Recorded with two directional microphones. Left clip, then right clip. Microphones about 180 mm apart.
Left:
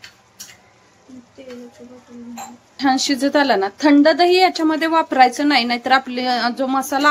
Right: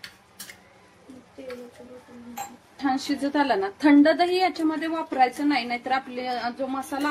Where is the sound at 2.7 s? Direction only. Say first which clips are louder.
Left 9 dB; 50° left (ahead or behind).